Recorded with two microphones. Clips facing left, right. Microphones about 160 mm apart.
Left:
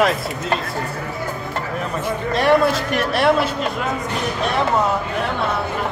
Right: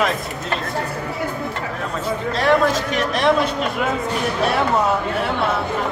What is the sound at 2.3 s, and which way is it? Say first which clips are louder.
A man's voice: left 1 dB; 15° left (ahead or behind).